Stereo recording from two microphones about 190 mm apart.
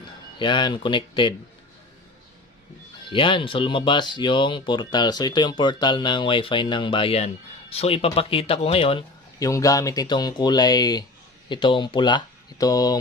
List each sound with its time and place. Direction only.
0.4 s speech: 25° left (ahead or behind)
3.1 s speech: 25° left (ahead or behind)
9.5 s speech: 15° left (ahead or behind)